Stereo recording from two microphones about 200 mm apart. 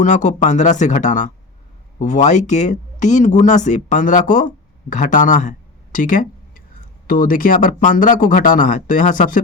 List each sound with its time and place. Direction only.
0.0 s speech: 40° left (ahead or behind)